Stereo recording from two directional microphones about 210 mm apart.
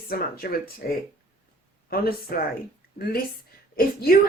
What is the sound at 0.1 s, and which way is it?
Speech, 45° left (ahead or behind).